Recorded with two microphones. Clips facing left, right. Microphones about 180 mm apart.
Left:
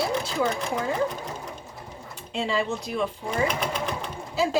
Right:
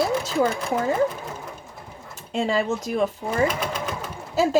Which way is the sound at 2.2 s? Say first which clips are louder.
Right 4 dB; 45° right (ahead or behind).